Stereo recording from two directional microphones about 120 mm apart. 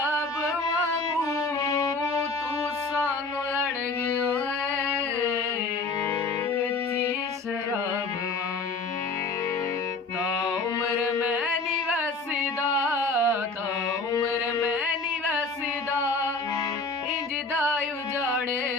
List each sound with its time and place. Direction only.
1.2 s music: 25° left (ahead or behind)
4.0 s singing: 25° left (ahead or behind)
10.4 s carnatic music: 30° left (ahead or behind)
12.8 s music: 15° right (ahead or behind)